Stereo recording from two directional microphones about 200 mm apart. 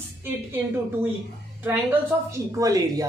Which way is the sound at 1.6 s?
10° right (ahead or behind).